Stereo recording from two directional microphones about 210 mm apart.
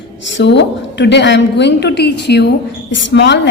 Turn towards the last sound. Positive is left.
turn(degrees=55)  # may be behind; listen again after turning